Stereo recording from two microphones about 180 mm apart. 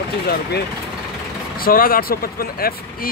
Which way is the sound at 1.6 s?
50° left (ahead or behind).